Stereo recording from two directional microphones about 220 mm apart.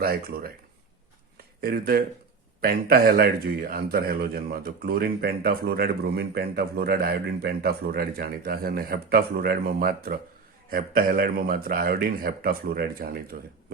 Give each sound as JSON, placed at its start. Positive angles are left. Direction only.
{"t": 0.0, "sound": "a man's voice", "side_deg": -45}
{"t": 1.6, "sound": "a man's voice", "side_deg": -45}